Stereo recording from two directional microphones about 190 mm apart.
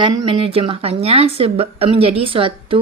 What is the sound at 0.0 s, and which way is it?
Speech, 30° right (ahead or behind).